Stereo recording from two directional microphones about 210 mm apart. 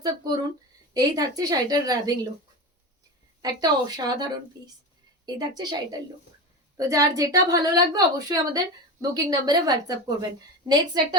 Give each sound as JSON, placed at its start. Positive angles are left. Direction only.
{"t": 0.9, "sound": "a woman's voice", "side_deg": -15}
{"t": 3.4, "sound": "a woman's voice", "side_deg": -20}